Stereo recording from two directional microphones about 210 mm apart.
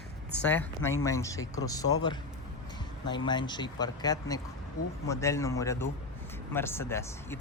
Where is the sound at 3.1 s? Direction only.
20° left (ahead or behind).